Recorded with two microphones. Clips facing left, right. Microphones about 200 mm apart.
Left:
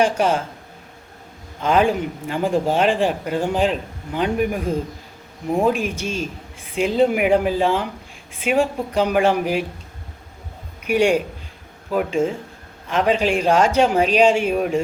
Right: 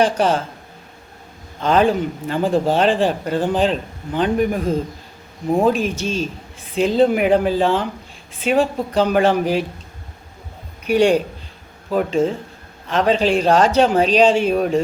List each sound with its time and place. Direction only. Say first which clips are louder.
0.2 s speech: right 1 dB; 10° left (ahead or behind)
1.6 s speech: right 2 dB; 10° left (ahead or behind)
10.9 s speech: right 2 dB; 10° left (ahead or behind)